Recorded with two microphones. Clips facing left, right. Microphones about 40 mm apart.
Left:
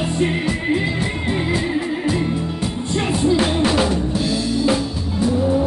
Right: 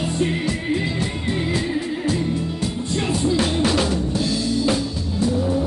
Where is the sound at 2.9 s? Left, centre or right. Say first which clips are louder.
Left 3 dB; centre.